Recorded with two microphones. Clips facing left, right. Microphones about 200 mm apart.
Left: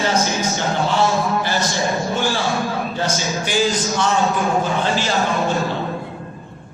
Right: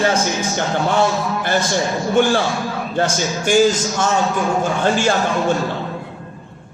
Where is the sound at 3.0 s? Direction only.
50° right (ahead or behind).